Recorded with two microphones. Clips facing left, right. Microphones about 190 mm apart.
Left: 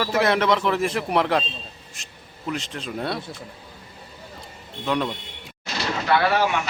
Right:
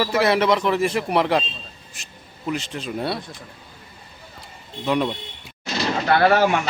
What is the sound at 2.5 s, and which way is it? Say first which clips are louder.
Speech: right 3 dB; centre (ahead or behind).